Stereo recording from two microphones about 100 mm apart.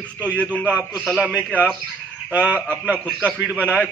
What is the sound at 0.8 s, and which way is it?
Speech, 5° left (ahead or behind).